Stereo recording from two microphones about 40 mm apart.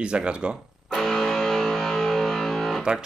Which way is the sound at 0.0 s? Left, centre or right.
Right.